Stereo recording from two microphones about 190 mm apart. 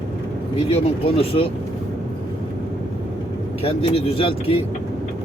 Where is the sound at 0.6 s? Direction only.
30° left (ahead or behind).